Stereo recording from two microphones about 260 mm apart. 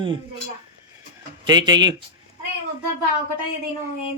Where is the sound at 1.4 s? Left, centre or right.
Centre.